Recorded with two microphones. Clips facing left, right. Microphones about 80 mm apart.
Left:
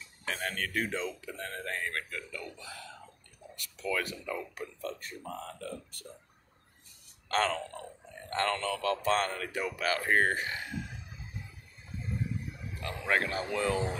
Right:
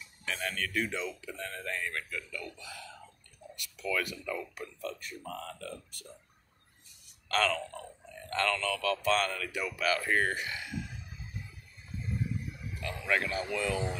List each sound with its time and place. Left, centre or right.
0.2 s speech: left
7.2 s speech: left
12.8 s speech: left